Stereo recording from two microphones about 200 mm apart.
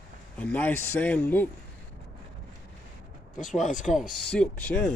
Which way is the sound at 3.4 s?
40° left (ahead or behind).